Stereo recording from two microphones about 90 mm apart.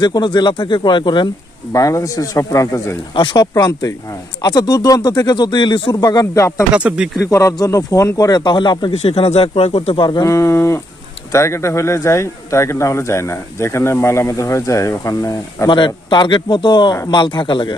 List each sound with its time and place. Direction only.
0.0 s speech: 55° left (ahead or behind)
1.7 s speech: 40° left (ahead or behind)
3.2 s speech: 55° left (ahead or behind)
5.9 s speech: 45° left (ahead or behind)
6.7 s speech: 10° right (ahead or behind)
7.2 s speech: 35° left (ahead or behind)
8.4 s speech: 60° left (ahead or behind); by 10.2 s 75° left (ahead or behind)
10.2 s speech: 35° left (ahead or behind)
15.7 s speech: 60° left (ahead or behind)